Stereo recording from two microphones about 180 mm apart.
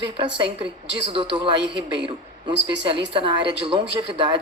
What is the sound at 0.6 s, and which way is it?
Speech, 30° right (ahead or behind).